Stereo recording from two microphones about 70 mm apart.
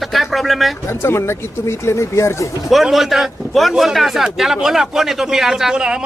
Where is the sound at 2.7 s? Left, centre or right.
Centre.